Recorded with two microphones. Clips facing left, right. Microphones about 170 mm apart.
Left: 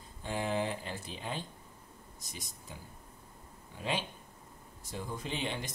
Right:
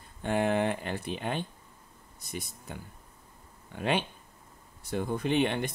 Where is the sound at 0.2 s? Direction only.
65° right (ahead or behind).